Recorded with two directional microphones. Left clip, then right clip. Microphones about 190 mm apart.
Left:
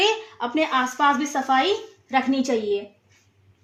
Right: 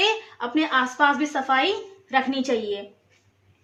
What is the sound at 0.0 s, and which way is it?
A woman's voice, 30° left (ahead or behind).